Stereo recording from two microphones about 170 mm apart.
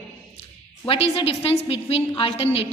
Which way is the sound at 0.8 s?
35° left (ahead or behind).